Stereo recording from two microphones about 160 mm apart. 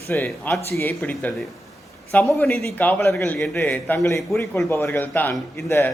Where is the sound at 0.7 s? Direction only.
15° left (ahead or behind).